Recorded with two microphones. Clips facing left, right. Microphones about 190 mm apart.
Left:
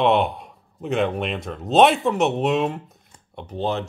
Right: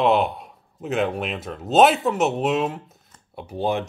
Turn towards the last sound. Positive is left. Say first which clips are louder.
# right 1 dB
turn(degrees=-10)  # may be behind; listen again after turning